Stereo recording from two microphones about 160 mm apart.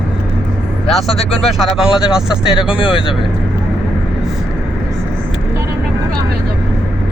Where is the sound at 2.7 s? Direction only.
35° left (ahead or behind).